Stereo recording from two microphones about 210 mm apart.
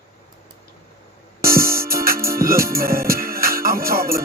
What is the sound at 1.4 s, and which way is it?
Music, 45° right (ahead or behind).